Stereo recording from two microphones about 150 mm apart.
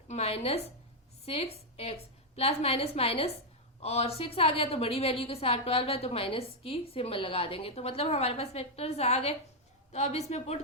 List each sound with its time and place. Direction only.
0.1 s a woman's voice: 40° left (ahead or behind)